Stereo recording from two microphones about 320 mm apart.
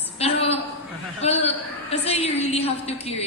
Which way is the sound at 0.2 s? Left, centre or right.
Centre.